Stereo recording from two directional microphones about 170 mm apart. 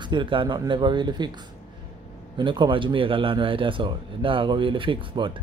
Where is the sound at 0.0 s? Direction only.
30° right (ahead or behind).